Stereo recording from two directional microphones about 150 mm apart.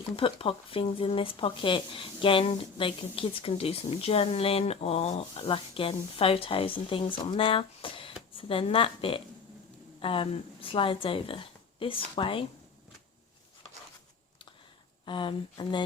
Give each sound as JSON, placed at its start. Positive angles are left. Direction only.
{"t": 0.2, "sound": "speech", "side_deg": 35}
{"t": 15.0, "sound": "speech", "side_deg": 35}